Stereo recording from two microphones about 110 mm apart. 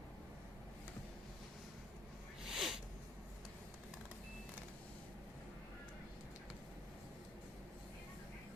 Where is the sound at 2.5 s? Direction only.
Centre (ahead or behind).